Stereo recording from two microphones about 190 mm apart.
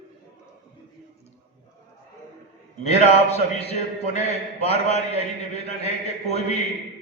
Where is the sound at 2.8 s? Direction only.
35° left (ahead or behind).